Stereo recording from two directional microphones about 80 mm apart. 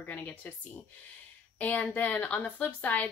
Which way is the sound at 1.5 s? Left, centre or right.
Centre.